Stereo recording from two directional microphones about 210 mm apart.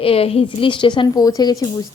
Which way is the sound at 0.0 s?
25° left (ahead or behind).